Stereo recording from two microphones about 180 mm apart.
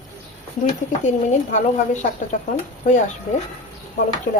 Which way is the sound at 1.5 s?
40° left (ahead or behind).